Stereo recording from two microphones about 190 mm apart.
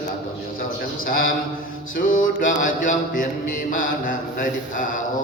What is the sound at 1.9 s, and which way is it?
Mantra, 45° left (ahead or behind).